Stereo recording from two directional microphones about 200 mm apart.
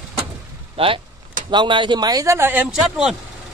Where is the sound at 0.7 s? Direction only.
25° right (ahead or behind); by 3.1 s 5° right (ahead or behind).